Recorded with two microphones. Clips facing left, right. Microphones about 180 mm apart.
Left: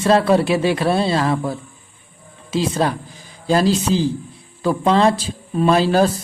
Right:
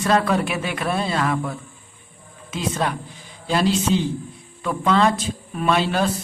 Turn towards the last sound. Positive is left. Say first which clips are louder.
# left 6 dB
turn(degrees=35)  # may be behind; listen again after turning